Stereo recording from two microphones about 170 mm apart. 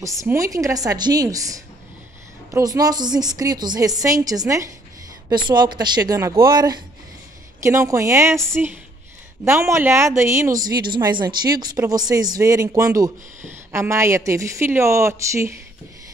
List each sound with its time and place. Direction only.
0.2 s a woman's voice: 20° right (ahead or behind)
9.4 s a woman's voice: 15° right (ahead or behind)